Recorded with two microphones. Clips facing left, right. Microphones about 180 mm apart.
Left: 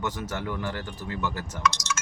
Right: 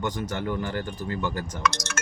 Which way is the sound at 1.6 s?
60° right (ahead or behind).